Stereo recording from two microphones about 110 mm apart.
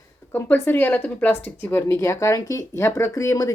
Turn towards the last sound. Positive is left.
turn(degrees=30)  # may be behind; listen again after turning